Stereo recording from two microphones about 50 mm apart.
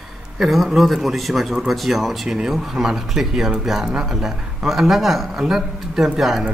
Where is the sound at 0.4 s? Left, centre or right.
Centre.